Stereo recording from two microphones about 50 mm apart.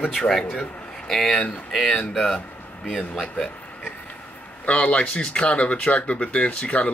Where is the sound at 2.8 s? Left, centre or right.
Centre.